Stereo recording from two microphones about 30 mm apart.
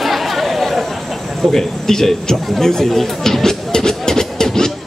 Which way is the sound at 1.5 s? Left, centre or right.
Centre.